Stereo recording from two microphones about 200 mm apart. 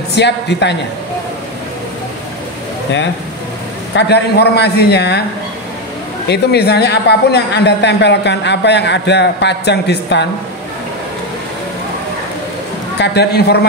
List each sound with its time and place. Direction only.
0.1 s speech: 60° left (ahead or behind)
3.9 s speech: 55° left (ahead or behind)
6.2 s speech: 55° left (ahead or behind)
13.0 s speech: 55° left (ahead or behind)